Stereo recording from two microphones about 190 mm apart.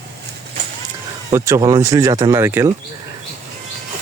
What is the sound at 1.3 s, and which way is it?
Speech, 15° right (ahead or behind).